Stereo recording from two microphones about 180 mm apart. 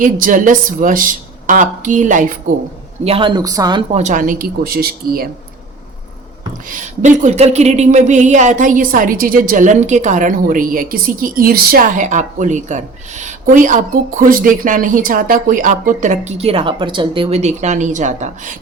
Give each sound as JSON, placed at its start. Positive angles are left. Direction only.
{"t": 0.0, "sound": "speech", "side_deg": -50}
{"t": 3.0, "sound": "a woman's voice", "side_deg": -30}
{"t": 3.9, "sound": "speech", "side_deg": -45}
{"t": 6.7, "sound": "speech", "side_deg": -45}